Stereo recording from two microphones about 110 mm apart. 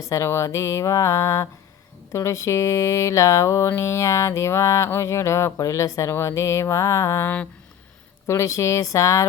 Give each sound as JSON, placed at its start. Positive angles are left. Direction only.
{"t": 0.1, "sound": "speech", "side_deg": 25}